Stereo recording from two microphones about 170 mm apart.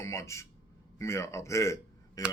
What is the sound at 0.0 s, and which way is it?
Speech, 15° left (ahead or behind).